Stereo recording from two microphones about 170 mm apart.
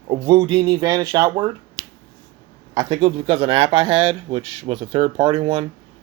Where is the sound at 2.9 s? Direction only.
35° right (ahead or behind).